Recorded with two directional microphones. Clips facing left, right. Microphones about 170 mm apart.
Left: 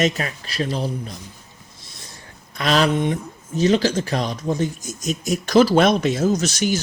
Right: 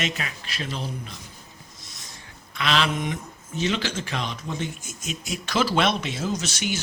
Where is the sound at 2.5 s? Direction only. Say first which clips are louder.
Left 6 dB; 40° left (ahead or behind).